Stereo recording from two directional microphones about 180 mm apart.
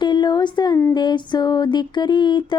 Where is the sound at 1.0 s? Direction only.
25° left (ahead or behind).